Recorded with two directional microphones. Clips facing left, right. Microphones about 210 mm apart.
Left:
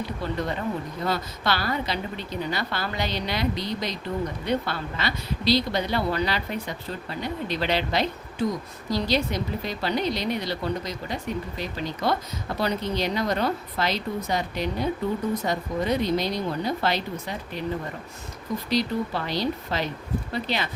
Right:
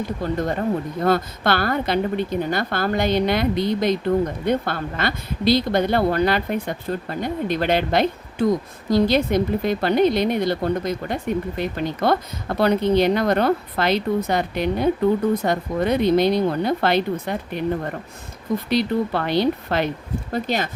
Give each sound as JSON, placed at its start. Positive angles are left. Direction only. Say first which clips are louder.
{"t": 0.0, "sound": "a woman's voice", "louder": "right 5 dB", "side_deg": -45}
{"t": 18.7, "sound": "a woman's voice", "louder": "right 4 dB", "side_deg": -60}
{"t": 20.3, "sound": "speech", "louder": "right 6 dB", "side_deg": -45}